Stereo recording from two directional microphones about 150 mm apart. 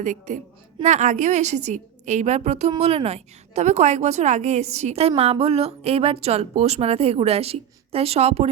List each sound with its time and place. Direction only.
0.0 s a woman's voice: 55° right (ahead or behind)